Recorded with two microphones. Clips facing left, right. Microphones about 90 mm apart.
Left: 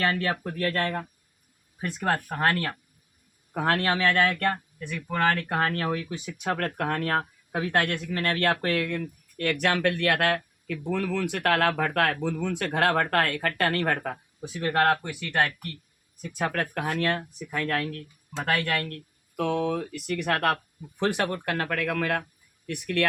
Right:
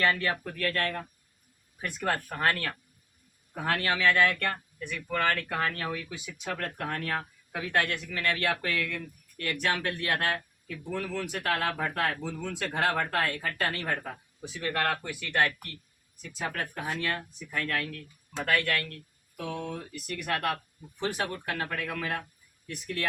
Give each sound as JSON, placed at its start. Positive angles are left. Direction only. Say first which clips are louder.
{"t": 0.0, "sound": "speech", "louder": "left 1 dB", "side_deg": 30}
{"t": 1.8, "sound": "speech", "louder": "left 4 dB", "side_deg": 20}
{"t": 3.5, "sound": "speech", "louder": "left 5 dB", "side_deg": 65}
{"t": 3.8, "sound": "speech", "louder": "left 2 dB", "side_deg": 45}
{"t": 4.9, "sound": "speech", "louder": "left 4 dB", "side_deg": 15}
{"t": 5.7, "sound": "speech", "louder": "left 6 dB", "side_deg": 55}
{"t": 14.6, "sound": "speech", "louder": "left 7 dB", "side_deg": 30}
{"t": 15.0, "sound": "speech", "louder": "left 1 dB", "side_deg": 20}
{"t": 16.2, "sound": "speech", "louder": "left 6 dB", "side_deg": 60}
{"t": 18.3, "sound": "speech", "louder": "left 2 dB", "side_deg": 20}
{"t": 19.4, "sound": "speech", "louder": "left 9 dB", "side_deg": 90}